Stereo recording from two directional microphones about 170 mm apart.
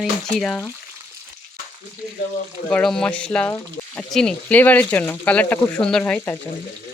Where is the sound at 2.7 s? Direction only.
5° left (ahead or behind).